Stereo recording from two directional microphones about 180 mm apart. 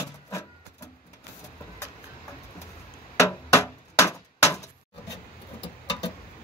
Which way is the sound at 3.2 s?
15° left (ahead or behind).